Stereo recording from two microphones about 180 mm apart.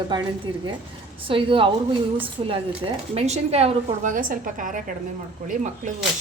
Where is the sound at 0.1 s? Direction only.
25° right (ahead or behind); by 5.5 s 50° right (ahead or behind).